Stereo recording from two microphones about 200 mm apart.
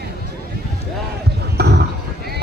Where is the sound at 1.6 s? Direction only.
55° right (ahead or behind).